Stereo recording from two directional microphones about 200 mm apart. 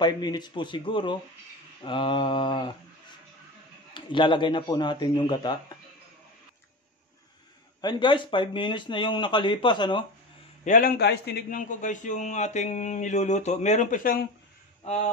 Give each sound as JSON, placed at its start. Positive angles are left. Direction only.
{"t": 0.0, "sound": "speech", "side_deg": 20}
{"t": 3.9, "sound": "speech", "side_deg": 25}
{"t": 7.8, "sound": "speech", "side_deg": 20}
{"t": 10.6, "sound": "a man's voice", "side_deg": 40}